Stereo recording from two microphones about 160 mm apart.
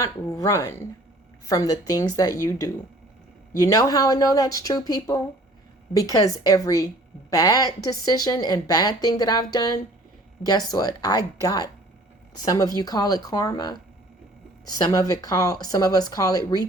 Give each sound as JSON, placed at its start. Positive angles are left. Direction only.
{"t": 0.0, "sound": "a woman's voice", "side_deg": 20}